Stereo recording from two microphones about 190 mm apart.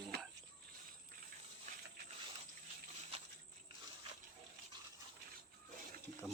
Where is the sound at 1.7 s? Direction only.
40° right (ahead or behind).